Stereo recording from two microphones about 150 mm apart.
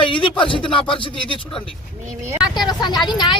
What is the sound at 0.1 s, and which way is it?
A woman's voice, 35° left (ahead or behind).